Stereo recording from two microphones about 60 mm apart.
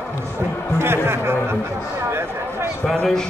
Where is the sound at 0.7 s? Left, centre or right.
Right.